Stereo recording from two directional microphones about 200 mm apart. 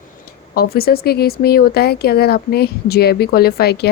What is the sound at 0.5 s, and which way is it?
Speech, 50° left (ahead or behind).